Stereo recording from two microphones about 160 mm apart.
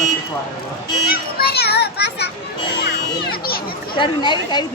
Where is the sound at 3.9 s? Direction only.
30° left (ahead or behind).